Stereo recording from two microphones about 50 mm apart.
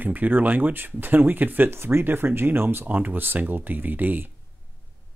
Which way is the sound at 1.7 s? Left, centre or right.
Right.